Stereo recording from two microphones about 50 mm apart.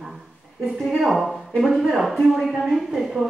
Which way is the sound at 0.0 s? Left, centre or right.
Centre.